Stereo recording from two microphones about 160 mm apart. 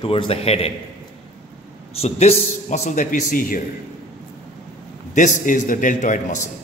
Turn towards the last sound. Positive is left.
turn(degrees=50)  # may be behind; listen again after turning